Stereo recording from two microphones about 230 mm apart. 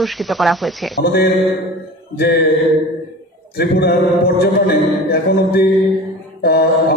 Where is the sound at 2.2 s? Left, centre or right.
Left.